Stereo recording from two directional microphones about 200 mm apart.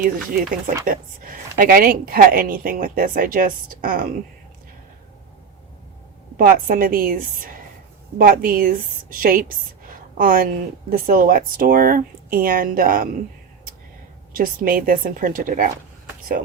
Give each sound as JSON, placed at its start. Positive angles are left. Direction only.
{"t": 0.9, "sound": "speech", "side_deg": -45}
{"t": 6.3, "sound": "speech", "side_deg": -45}
{"t": 14.3, "sound": "speech", "side_deg": -45}